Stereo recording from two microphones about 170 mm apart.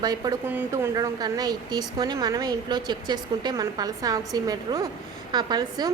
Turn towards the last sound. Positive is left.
turn(degrees=-25)  # may be behind; listen again after turning